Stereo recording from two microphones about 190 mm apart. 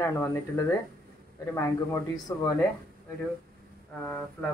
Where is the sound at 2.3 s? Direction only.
15° left (ahead or behind).